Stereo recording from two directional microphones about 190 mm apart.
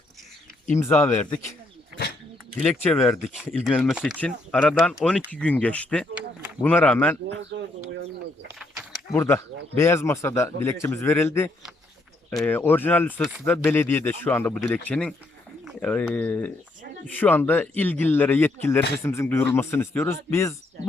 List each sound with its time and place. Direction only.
0.8 s speech: 15° left (ahead or behind)
2.6 s speech: 5° left (ahead or behind)
9.1 s speech: 15° left (ahead or behind)